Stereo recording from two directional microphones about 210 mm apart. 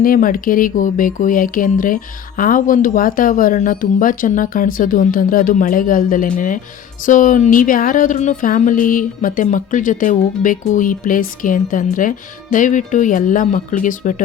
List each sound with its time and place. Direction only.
0.0 s speech: 40° left (ahead or behind)